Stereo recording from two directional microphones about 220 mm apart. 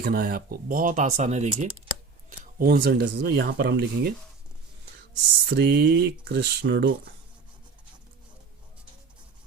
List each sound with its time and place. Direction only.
0.0 s speech: 45° right (ahead or behind)
5.5 s speech: 50° right (ahead or behind)